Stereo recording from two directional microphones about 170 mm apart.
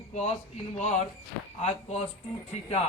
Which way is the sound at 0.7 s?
40° left (ahead or behind).